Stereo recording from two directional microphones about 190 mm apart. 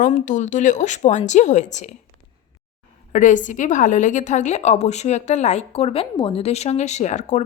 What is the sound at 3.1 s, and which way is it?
A woman's voice, 40° left (ahead or behind).